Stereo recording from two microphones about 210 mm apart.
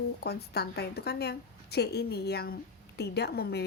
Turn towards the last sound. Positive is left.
turn(degrees=50)  # may be behind; listen again after turning